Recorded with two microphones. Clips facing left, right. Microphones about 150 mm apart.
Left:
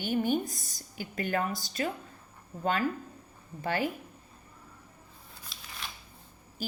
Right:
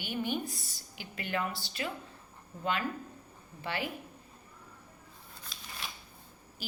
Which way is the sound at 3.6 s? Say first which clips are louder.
Left 6 dB; 45° left (ahead or behind).